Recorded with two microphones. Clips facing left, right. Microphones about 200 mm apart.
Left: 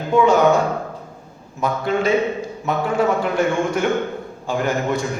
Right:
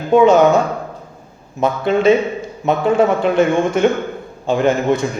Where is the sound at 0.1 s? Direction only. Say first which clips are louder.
Right 5 dB; 20° right (ahead or behind).